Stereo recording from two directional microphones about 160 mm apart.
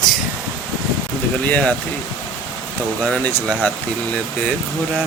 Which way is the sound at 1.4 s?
10° left (ahead or behind).